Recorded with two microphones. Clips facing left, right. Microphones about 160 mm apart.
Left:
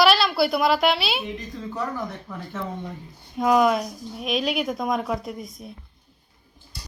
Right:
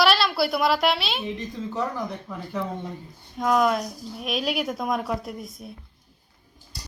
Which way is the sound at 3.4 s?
5° left (ahead or behind).